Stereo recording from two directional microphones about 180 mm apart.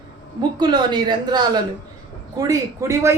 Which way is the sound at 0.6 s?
25° right (ahead or behind).